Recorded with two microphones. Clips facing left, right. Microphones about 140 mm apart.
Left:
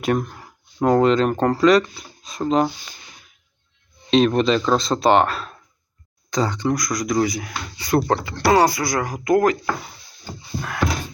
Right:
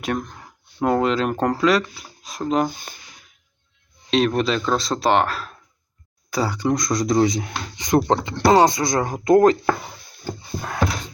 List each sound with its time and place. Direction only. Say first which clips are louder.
0.0 s speech: left 4 dB; centre (ahead or behind)
2.6 s speech: left 1 dB; 50° right (ahead or behind)
4.1 s speech: left 3 dB; centre (ahead or behind)
6.7 s speech: right 2 dB; 25° right (ahead or behind)
10.6 s a sound: left 1 dB; 20° right (ahead or behind)